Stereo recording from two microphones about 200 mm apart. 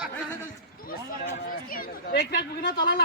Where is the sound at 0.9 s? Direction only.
45° left (ahead or behind).